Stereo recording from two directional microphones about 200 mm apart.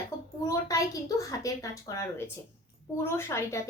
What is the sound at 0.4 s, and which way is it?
Speech, 15° left (ahead or behind).